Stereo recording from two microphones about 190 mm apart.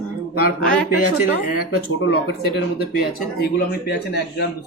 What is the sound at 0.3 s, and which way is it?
A man's voice, 50° left (ahead or behind).